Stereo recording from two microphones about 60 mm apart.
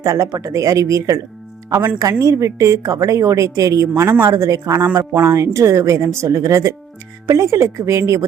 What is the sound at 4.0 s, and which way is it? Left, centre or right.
Speech, right.